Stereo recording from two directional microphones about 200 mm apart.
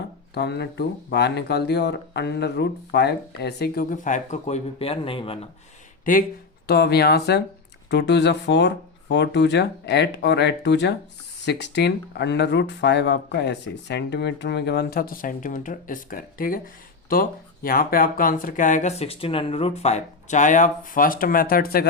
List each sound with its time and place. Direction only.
0.3 s speech: 55° left (ahead or behind); by 5.4 s 25° left (ahead or behind)
6.1 s speech: 45° left (ahead or behind)
6.7 s speech: 55° left (ahead or behind)